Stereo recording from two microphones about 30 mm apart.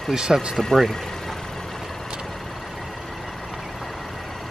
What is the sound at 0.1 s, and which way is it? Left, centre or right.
Speech, right.